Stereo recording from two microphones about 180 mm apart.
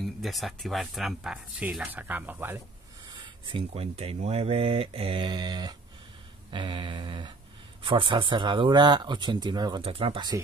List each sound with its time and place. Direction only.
0.0 s speech: centre (ahead or behind)
3.1 s speech: 25° right (ahead or behind)